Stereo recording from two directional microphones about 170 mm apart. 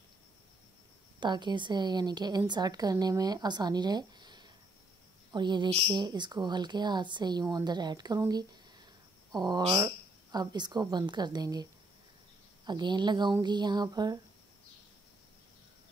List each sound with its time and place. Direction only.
1.2 s a woman's voice: 25° right (ahead or behind)
12.6 s a woman's voice: 25° right (ahead or behind)